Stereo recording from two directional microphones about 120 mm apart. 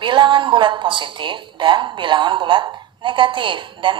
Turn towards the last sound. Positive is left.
turn(degrees=-45)  # may be behind; listen again after turning